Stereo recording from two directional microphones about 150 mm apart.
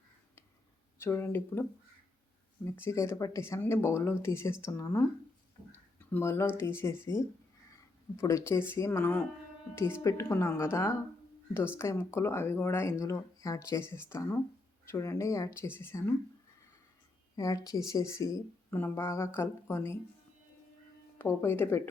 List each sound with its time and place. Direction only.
0.9 s speech: 15° left (ahead or behind)
2.6 s speech: 15° left (ahead or behind)
6.1 s speech: 15° left (ahead or behind)
17.3 s speech: 25° left (ahead or behind)
21.2 s speech: 15° left (ahead or behind)